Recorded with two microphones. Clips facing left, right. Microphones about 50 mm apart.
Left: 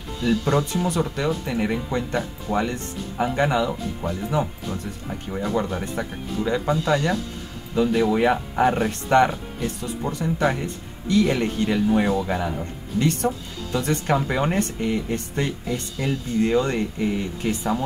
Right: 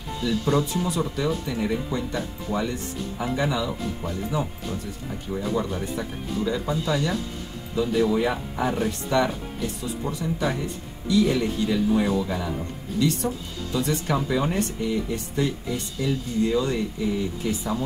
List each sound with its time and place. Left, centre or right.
0.2 s speech: left
12.2 s speech: left